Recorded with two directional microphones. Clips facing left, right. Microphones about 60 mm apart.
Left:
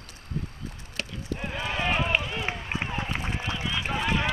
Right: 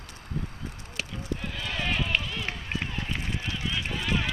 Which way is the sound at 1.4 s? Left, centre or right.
Left.